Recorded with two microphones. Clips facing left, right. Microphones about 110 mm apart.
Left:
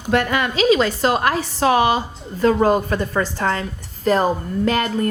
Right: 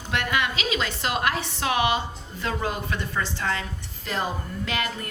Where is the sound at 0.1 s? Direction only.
40° left (ahead or behind).